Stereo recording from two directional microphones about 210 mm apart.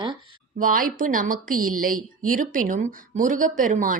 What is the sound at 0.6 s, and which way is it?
Speech, 40° right (ahead or behind).